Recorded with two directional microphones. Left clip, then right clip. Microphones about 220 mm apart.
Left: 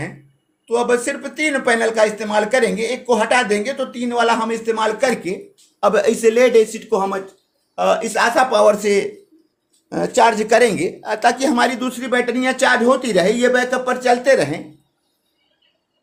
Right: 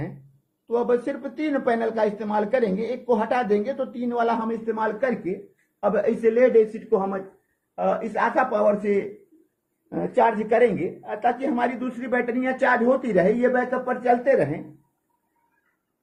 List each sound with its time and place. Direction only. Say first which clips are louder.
0.7 s speech: left 5 dB; 10° left (ahead or behind)
4.6 s a man's voice: left 7 dB; 25° left (ahead or behind)